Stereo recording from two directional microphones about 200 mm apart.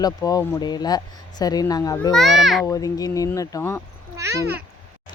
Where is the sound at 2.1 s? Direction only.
Centre (ahead or behind).